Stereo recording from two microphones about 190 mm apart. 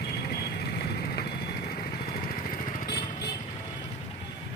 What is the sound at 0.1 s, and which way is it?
Vehicle, 55° left (ahead or behind).